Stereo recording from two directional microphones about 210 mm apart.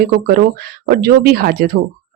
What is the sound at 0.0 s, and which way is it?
Speech, 45° right (ahead or behind).